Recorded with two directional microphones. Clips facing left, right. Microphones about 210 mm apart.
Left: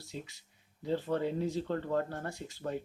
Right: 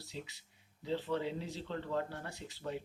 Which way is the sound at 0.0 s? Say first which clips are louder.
Left 3 dB; 45° left (ahead or behind).